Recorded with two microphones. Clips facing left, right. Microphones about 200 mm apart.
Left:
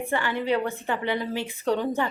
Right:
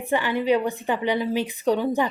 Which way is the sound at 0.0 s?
15° right (ahead or behind).